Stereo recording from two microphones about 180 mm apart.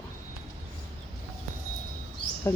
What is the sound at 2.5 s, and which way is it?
Speech, 15° left (ahead or behind).